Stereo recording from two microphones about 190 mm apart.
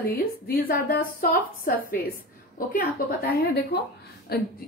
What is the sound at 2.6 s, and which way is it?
Speech, 45° left (ahead or behind).